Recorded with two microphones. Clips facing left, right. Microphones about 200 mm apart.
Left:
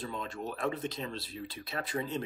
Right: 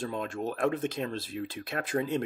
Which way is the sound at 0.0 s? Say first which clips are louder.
Right 5 dB; 50° right (ahead or behind).